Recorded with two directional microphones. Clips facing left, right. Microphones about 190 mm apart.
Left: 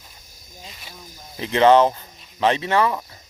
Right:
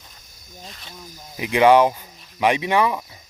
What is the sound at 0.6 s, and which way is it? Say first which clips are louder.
Speech: right 1 dB; 5° left (ahead or behind).